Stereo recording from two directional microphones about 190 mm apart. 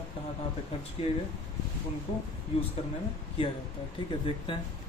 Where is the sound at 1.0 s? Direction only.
30° left (ahead or behind).